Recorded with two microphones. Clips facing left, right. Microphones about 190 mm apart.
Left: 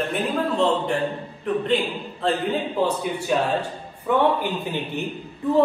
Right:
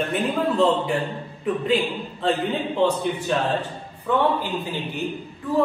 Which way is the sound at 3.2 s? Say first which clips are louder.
Left 1 dB; 10° left (ahead or behind).